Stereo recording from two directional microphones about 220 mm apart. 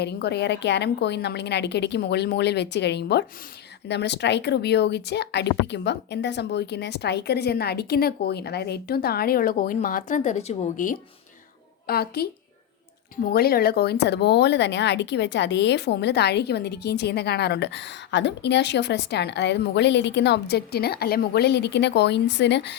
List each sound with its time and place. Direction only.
0.0 s speech: 50° left (ahead or behind); by 10.9 s 35° left (ahead or behind)
11.9 s speech: 45° left (ahead or behind)
13.3 s speech: 45° left (ahead or behind)